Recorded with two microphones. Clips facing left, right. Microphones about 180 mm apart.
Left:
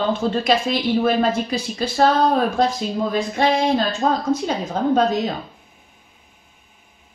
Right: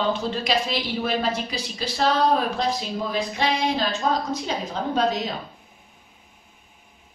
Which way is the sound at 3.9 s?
50° left (ahead or behind).